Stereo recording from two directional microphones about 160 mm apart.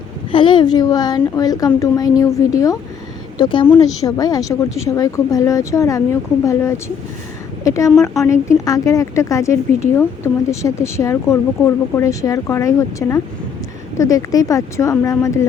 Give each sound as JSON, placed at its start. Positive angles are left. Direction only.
{"t": 0.3, "sound": "a woman's voice", "side_deg": 30}
{"t": 3.3, "sound": "a woman's voice", "side_deg": 30}